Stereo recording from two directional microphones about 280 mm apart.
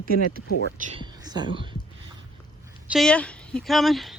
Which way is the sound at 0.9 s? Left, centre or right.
Centre.